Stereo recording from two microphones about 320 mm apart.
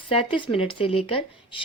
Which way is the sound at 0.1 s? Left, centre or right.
Centre.